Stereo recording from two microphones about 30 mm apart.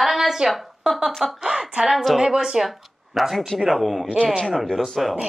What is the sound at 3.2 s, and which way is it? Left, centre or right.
A man's voice, centre.